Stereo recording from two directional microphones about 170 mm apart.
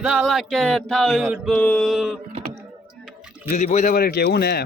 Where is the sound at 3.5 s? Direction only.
45° left (ahead or behind); by 4.6 s 70° left (ahead or behind).